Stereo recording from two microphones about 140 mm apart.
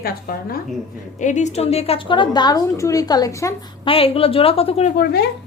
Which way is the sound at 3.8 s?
45° left (ahead or behind).